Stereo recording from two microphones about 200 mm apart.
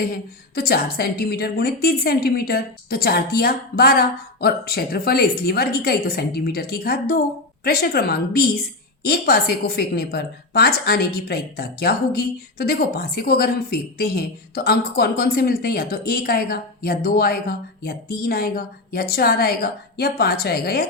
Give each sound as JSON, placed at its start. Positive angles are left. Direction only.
{"t": 0.0, "sound": "a woman's voice", "side_deg": 50}